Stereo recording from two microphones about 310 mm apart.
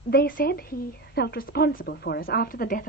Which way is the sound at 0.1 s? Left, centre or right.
Left.